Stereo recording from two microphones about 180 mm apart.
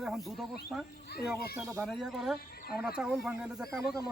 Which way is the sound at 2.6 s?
60° left (ahead or behind).